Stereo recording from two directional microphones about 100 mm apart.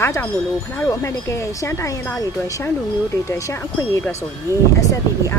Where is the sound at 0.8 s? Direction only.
30° left (ahead or behind).